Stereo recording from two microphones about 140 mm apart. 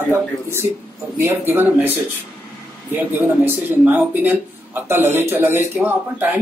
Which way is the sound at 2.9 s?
15° right (ahead or behind).